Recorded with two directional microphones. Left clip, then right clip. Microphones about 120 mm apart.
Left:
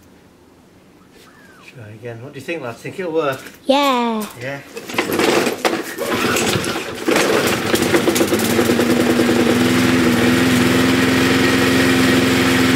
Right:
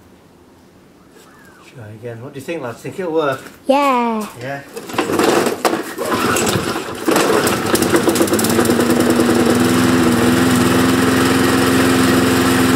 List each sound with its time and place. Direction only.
2.0 s speech: centre (ahead or behind)
3.6 s speech: 20° left (ahead or behind)
4.4 s a sound: 5° right (ahead or behind)